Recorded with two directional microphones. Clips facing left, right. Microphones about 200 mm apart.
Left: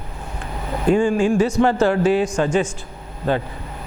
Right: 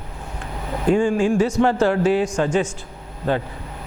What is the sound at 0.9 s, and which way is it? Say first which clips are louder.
A man's voice: left 1 dB; 15° left (ahead or behind).